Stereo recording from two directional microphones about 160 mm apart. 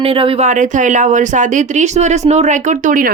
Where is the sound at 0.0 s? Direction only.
35° right (ahead or behind).